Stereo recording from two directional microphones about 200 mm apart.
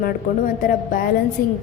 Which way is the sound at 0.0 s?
45° left (ahead or behind).